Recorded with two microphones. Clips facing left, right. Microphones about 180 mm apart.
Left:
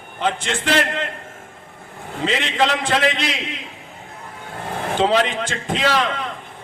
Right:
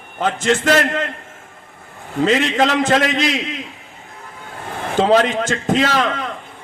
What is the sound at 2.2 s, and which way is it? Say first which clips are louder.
A man's voice: right 5 dB; 45° right (ahead or behind).